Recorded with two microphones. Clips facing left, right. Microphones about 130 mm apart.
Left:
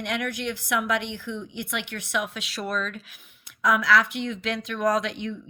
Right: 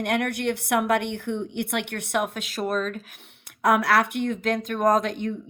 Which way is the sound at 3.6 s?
55° right (ahead or behind).